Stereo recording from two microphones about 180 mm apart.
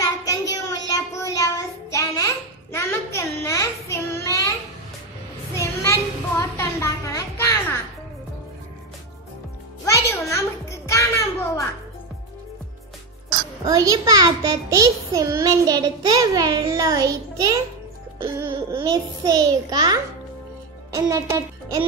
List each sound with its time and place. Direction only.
0.0 s child singing: 20° left (ahead or behind)
5.5 s a sound: 15° left (ahead or behind)
9.8 s a sound: 15° left (ahead or behind)
13.7 s a child's voice: 20° right (ahead or behind)
18.2 s music: 15° right (ahead or behind)
18.8 s a child's voice: 20° right (ahead or behind)